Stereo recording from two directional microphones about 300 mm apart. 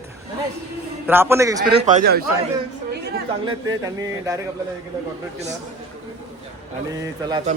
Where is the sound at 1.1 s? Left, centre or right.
Centre.